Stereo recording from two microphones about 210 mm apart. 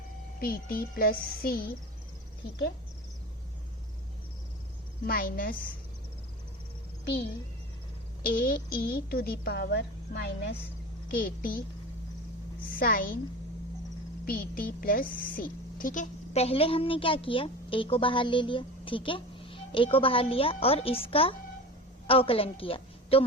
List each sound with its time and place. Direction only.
0.3 s a woman's voice: 45° left (ahead or behind)
5.0 s a woman's voice: 45° left (ahead or behind)
8.2 s a woman's voice: 40° left (ahead or behind)
12.6 s a woman's voice: 45° left (ahead or behind)
14.3 s a woman's voice: 45° left (ahead or behind); by 23.2 s 25° left (ahead or behind)